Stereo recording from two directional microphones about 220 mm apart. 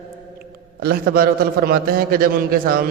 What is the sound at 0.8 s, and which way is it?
A man's voice, 45° right (ahead or behind).